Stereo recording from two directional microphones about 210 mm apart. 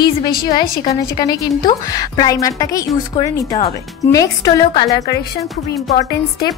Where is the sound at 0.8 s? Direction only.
20° left (ahead or behind).